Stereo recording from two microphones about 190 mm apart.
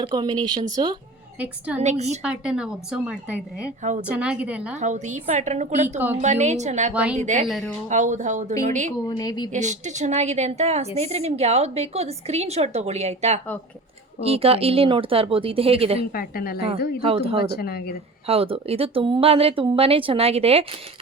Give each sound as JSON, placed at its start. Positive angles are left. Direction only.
{"t": 0.0, "sound": "speech", "side_deg": -25}
{"t": 1.4, "sound": "a woman's voice", "side_deg": -5}
{"t": 1.8, "sound": "a woman's voice", "side_deg": -35}
{"t": 2.2, "sound": "a woman's voice", "side_deg": -5}
{"t": 4.8, "sound": "a woman's voice", "side_deg": -40}
{"t": 6.9, "sound": "a woman's voice", "side_deg": -5}
{"t": 7.2, "sound": "a woman's voice", "side_deg": -40}
{"t": 9.0, "sound": "a woman's voice", "side_deg": 20}
{"t": 9.5, "sound": "a woman's voice", "side_deg": -40}
{"t": 16.1, "sound": "a woman's voice", "side_deg": 50}
{"t": 17.0, "sound": "speech", "side_deg": -30}
{"t": 17.4, "sound": "speech", "side_deg": 55}
{"t": 18.3, "sound": "speech", "side_deg": -30}